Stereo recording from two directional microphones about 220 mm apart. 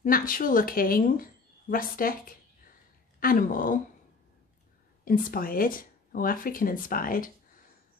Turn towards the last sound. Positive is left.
turn(degrees=40)  # may be behind; listen again after turning